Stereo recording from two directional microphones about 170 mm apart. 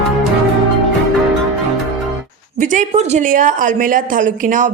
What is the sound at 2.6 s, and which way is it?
A woman's voice, 45° right (ahead or behind).